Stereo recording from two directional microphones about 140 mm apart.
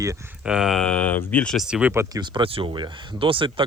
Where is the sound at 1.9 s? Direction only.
20° right (ahead or behind).